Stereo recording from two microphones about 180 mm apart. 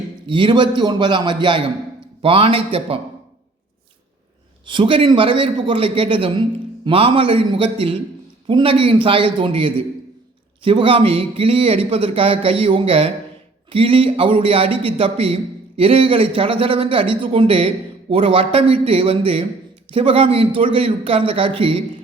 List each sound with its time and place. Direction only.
0.3 s a man's voice: 25° right (ahead or behind)
4.6 s a man's voice: 25° right (ahead or behind)